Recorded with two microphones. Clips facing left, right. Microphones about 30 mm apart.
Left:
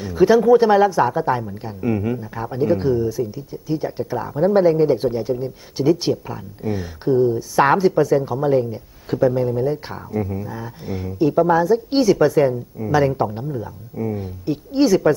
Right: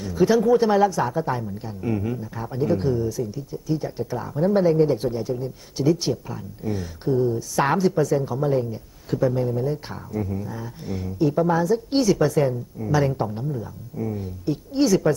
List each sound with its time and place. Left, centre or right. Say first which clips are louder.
0.0 s speech: left 5 dB; centre